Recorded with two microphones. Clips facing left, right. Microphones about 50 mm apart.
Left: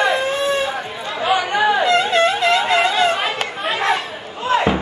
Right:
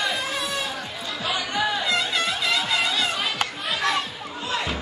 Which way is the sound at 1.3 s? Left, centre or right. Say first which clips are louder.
Left 9 dB; left.